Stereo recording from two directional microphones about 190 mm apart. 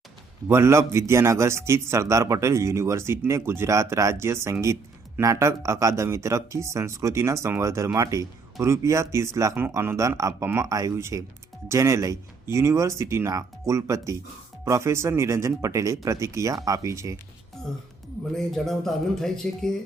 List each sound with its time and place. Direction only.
0.4 s a man's voice: 15° right (ahead or behind)
18.3 s speech: centre (ahead or behind)